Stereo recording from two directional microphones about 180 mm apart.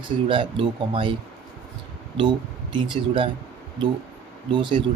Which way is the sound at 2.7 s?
30° right (ahead or behind).